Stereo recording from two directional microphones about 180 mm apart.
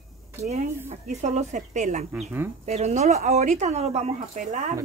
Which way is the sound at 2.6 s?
40° right (ahead or behind).